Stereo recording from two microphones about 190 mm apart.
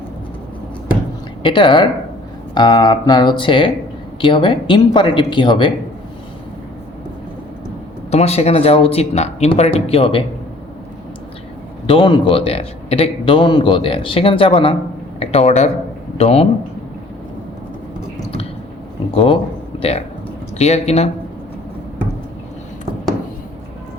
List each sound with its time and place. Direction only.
1.4 s a man's voice: 25° left (ahead or behind)
8.1 s speech: 35° left (ahead or behind)
11.9 s a man's voice: 25° left (ahead or behind)
19.1 s a man's voice: 30° left (ahead or behind)